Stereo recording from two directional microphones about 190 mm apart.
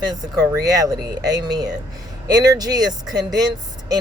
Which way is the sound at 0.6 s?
20° right (ahead or behind).